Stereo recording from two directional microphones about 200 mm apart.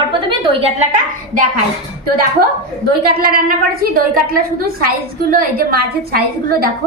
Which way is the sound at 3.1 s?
45° right (ahead or behind).